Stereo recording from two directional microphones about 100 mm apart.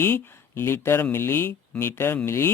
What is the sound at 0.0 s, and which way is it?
Speech, 25° left (ahead or behind).